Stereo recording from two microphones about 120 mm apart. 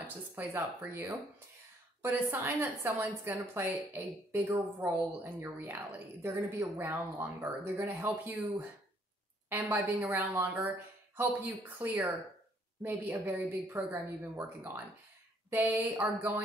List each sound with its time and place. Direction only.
0.0 s speech: 15° right (ahead or behind)